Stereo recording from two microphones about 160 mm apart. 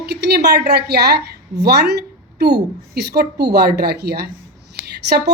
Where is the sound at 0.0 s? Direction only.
85° right.